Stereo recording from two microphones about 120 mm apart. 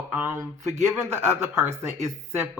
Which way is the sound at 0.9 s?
20° right (ahead or behind).